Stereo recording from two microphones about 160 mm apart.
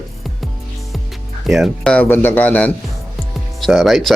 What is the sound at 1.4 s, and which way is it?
Speech, centre (ahead or behind).